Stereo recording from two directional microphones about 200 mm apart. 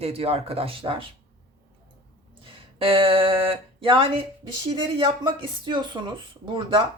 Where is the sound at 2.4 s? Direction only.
25° right (ahead or behind).